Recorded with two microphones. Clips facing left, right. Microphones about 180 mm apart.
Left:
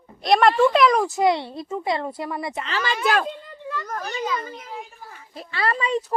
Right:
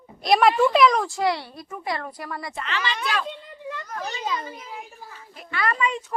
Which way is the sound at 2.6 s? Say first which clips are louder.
Left 5 dB; 40° left (ahead or behind).